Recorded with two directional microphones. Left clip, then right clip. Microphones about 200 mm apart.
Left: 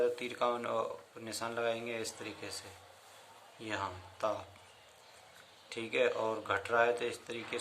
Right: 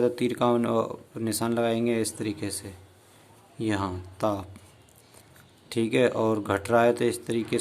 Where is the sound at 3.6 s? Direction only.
50° right (ahead or behind).